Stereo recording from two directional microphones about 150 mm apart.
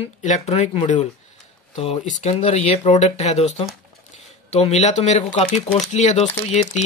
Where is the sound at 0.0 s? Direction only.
45° left (ahead or behind).